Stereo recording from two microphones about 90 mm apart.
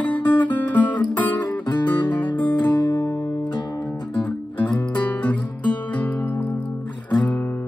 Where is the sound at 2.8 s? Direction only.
45° left (ahead or behind).